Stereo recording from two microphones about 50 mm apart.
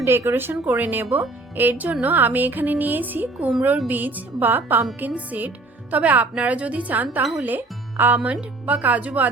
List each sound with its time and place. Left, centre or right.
0.0 s speech: right
0.7 s a woman's voice: right
7.2 s speech: centre
7.4 s speech: right